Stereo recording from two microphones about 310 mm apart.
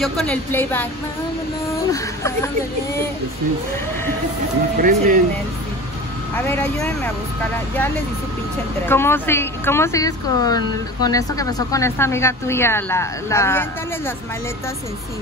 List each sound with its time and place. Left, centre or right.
0.0 s speech: centre
1.9 s speech: centre
4.8 s speech: right
6.3 s speech: centre
8.8 s speech: centre